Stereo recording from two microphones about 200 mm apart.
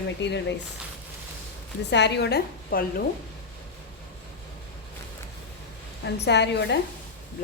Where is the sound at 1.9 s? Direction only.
60° left (ahead or behind).